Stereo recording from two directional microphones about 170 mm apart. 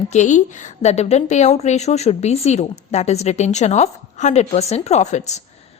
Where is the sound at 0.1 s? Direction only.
45° left (ahead or behind).